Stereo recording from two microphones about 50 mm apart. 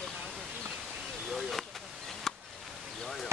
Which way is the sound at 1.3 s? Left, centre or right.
Centre.